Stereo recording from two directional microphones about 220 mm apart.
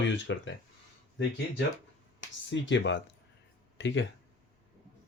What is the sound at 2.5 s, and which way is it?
Speech, 55° left (ahead or behind).